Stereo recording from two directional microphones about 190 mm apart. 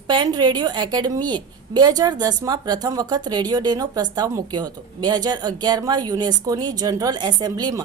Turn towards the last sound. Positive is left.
turn(degrees=-20)  # may be behind; listen again after turning